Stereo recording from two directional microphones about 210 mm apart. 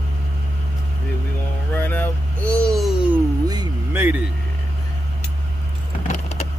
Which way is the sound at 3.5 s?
15° right (ahead or behind).